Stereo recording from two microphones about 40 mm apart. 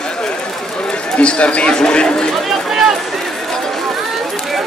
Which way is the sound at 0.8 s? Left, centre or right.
Left.